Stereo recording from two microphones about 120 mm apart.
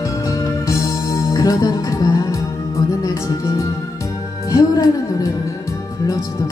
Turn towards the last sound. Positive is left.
turn(degrees=30)  # may be behind; listen again after turning